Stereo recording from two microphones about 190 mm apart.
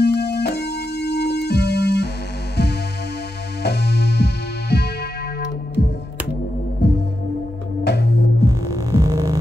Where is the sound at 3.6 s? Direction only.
60° left (ahead or behind).